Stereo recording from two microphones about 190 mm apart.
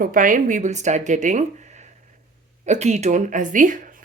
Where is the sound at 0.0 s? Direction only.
45° right (ahead or behind).